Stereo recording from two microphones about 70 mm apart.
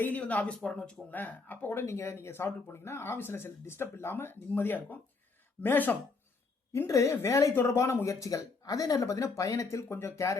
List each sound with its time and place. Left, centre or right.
0.0 s speech: left
1.1 s speech: left
1.8 s speech: left
6.8 s speech: left
9.6 s speech: left